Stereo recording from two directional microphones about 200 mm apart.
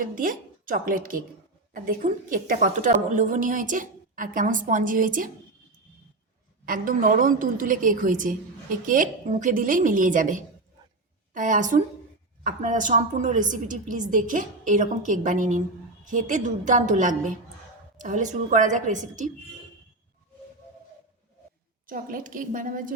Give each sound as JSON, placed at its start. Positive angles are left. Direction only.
{"t": 0.0, "sound": "a woman's voice", "side_deg": -45}
{"t": 6.7, "sound": "a woman's voice", "side_deg": -45}
{"t": 21.8, "sound": "a woman's voice", "side_deg": -45}